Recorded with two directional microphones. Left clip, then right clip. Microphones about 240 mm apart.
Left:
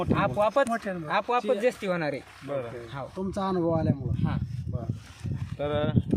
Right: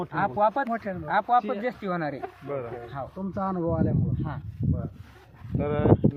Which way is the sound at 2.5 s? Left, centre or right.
Centre.